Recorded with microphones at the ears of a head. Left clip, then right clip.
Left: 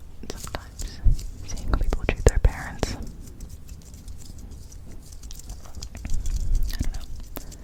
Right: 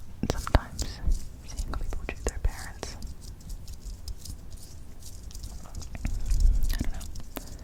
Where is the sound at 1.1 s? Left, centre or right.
Left.